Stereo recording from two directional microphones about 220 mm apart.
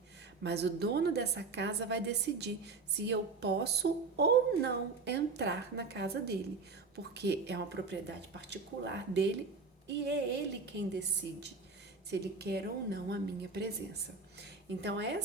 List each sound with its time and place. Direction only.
0.4 s a woman's voice: 50° right (ahead or behind)